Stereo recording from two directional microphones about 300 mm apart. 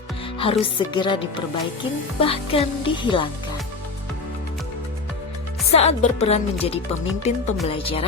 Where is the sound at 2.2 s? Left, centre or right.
Centre.